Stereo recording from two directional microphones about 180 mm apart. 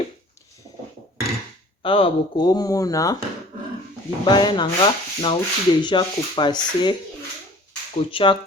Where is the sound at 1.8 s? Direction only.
30° left (ahead or behind).